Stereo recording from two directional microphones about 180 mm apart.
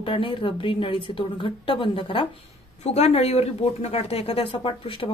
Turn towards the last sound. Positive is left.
turn(degrees=30)  # may be behind; listen again after turning